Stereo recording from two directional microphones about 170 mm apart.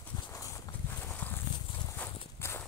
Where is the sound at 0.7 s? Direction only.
20° left (ahead or behind).